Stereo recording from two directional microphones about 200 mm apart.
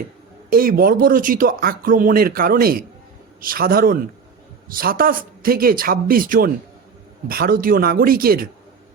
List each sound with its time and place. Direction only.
0.5 s speech: 45° right (ahead or behind)